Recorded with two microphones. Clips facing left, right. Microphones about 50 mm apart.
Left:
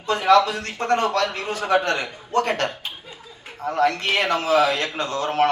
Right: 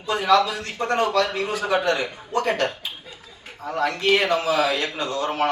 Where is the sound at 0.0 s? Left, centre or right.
Left.